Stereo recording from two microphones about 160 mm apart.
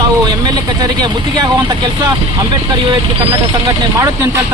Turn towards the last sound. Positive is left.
turn(degrees=-25)  # may be behind; listen again after turning